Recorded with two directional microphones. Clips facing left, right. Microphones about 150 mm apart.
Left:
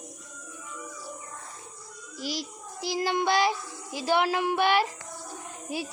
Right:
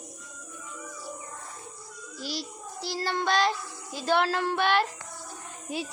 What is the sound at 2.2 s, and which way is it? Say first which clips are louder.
A child's voice: left 2 dB; 15° left (ahead or behind).